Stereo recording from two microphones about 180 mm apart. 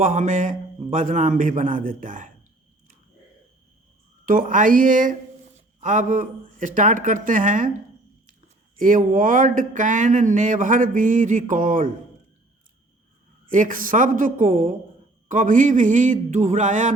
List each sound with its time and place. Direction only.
0.0 s speech: 45° right (ahead or behind)
4.3 s speech: 50° right (ahead or behind)
8.8 s speech: 45° right (ahead or behind)
13.5 s speech: 50° right (ahead or behind)